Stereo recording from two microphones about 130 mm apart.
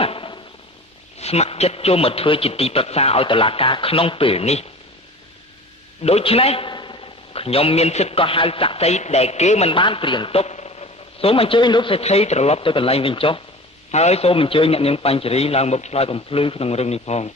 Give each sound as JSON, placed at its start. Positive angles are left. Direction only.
{"t": 0.0, "sound": "a sound", "side_deg": 45}
{"t": 1.2, "sound": "a man's voice", "side_deg": 55}
{"t": 6.0, "sound": "a man's voice", "side_deg": 50}
{"t": 6.7, "sound": "a man's voice", "side_deg": 35}
{"t": 9.7, "sound": "a man's voice", "side_deg": 40}
{"t": 13.9, "sound": "a man's voice", "side_deg": 55}